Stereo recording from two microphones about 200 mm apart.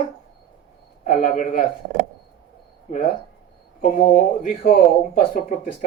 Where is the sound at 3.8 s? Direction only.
40° left (ahead or behind).